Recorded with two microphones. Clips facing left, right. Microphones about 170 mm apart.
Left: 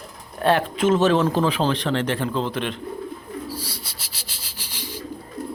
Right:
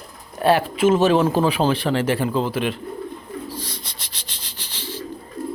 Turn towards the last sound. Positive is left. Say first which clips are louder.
# even
turn(degrees=10)  # may be behind; listen again after turning